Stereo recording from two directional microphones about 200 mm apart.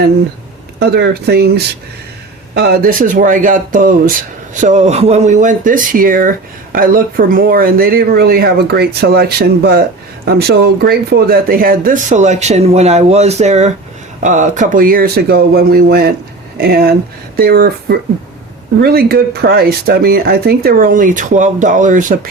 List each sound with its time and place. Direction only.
0.8 s speech: 55° right (ahead or behind)